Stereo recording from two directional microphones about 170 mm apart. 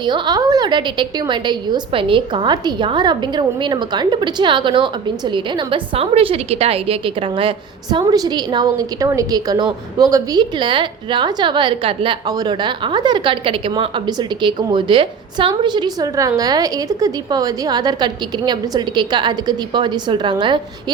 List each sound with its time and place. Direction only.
0.0 s a woman's voice: 25° right (ahead or behind)